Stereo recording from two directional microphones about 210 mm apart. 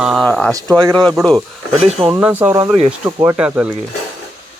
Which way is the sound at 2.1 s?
10° right (ahead or behind).